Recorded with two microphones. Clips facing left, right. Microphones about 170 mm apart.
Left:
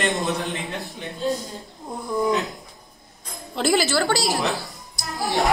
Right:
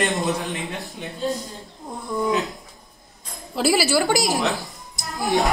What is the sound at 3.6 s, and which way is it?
Speech, 5° right (ahead or behind).